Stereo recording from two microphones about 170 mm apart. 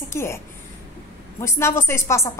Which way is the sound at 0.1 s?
15° left (ahead or behind).